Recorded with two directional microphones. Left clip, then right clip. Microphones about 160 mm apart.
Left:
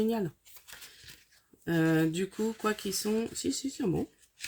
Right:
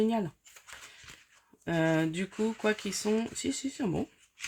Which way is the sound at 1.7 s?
40° right (ahead or behind).